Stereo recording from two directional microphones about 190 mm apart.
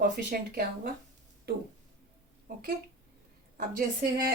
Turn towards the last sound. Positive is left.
turn(degrees=-45)  # may be behind; listen again after turning